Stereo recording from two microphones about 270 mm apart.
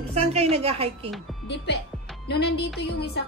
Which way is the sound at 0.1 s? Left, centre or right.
Right.